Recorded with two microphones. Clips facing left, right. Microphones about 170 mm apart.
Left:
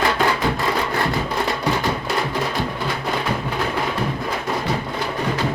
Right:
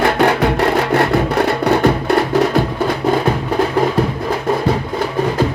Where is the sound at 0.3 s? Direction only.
70° right (ahead or behind).